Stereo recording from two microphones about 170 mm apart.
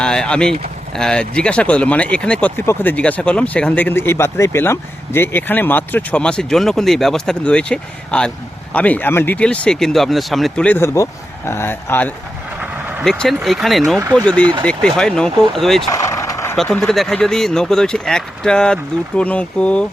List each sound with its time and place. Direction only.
0.0 s speech: 5° left (ahead or behind)
15.9 s vehicle: 20° left (ahead or behind)
16.6 s speech: 5° left (ahead or behind)